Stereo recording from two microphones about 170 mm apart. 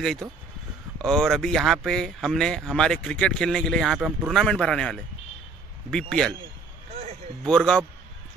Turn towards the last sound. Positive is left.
turn(degrees=5)  # may be behind; listen again after turning